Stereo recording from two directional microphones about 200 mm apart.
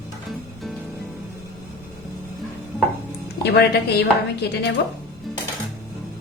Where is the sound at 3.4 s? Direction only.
55° left (ahead or behind).